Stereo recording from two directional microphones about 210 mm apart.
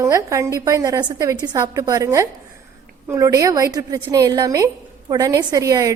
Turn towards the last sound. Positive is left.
turn(degrees=-15)  # may be behind; listen again after turning